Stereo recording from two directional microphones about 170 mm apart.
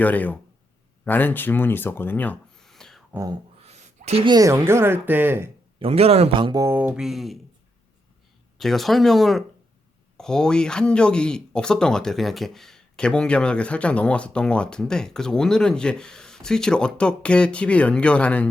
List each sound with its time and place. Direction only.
0.0 s speech: 10° left (ahead or behind)
3.1 s speech: 15° right (ahead or behind)
3.6 s a sound: 40° right (ahead or behind)
4.3 s speech: 20° right (ahead or behind)
5.8 s speech: 35° right (ahead or behind); by 7.3 s centre (ahead or behind)
8.5 s speech: centre (ahead or behind)